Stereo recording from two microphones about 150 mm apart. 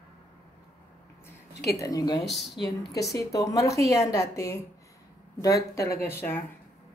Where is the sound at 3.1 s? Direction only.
20° left (ahead or behind).